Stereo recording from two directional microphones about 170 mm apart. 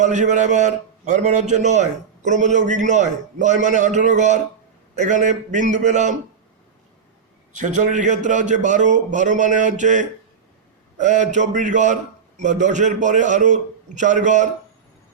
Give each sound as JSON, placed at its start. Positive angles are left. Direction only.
{"t": 0.0, "sound": "a man's voice", "side_deg": -45}
{"t": 7.5, "sound": "a man's voice", "side_deg": -45}